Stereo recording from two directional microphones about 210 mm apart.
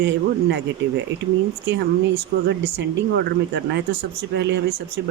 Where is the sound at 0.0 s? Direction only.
60° right (ahead or behind).